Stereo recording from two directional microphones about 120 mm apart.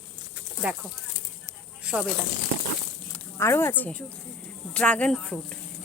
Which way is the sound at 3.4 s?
20° left (ahead or behind).